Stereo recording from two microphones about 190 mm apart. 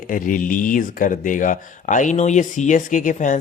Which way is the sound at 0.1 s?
45° left (ahead or behind).